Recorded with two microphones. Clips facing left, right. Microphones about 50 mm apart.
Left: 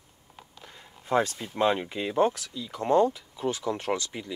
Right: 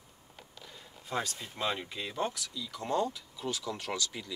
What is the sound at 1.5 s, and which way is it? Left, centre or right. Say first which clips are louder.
Speech: left 10 dB; left.